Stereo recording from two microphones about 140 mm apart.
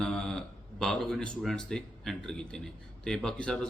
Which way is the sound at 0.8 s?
Centre (ahead or behind).